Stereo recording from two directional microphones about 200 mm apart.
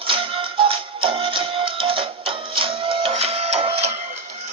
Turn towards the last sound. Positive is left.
turn(degrees=-30)  # may be behind; listen again after turning